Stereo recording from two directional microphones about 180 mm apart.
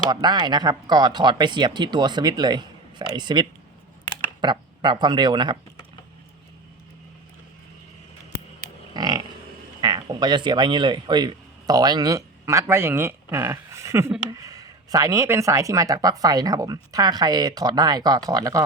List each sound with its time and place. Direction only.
0.1 s speech: 25° right (ahead or behind)
8.9 s livestock: 25° right (ahead or behind)
9.8 s speech: 25° right (ahead or behind)